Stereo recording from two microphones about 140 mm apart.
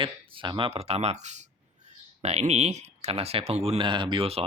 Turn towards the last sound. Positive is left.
turn(degrees=-40)  # may be behind; listen again after turning